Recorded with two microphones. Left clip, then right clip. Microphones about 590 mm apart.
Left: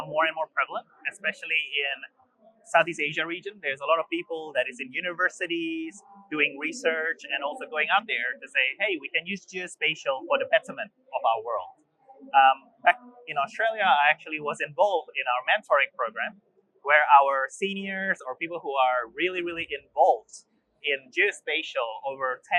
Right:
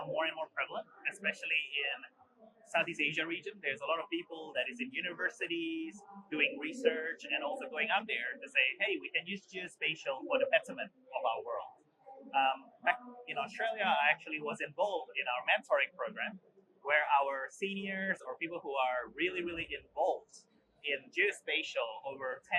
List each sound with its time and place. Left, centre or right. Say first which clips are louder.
0.0 s speech: left 10 dB; left